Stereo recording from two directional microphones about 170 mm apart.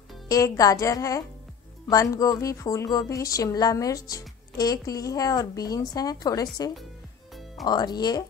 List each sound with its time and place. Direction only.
0.3 s a woman's voice: 20° left (ahead or behind)